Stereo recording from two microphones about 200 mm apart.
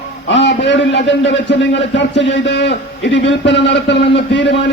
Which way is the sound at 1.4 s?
65° left (ahead or behind).